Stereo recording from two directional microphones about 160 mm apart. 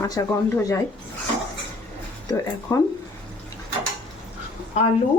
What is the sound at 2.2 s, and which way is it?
Speech, 20° left (ahead or behind).